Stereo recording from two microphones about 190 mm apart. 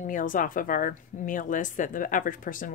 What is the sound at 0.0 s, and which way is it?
A woman's voice, 45° left (ahead or behind).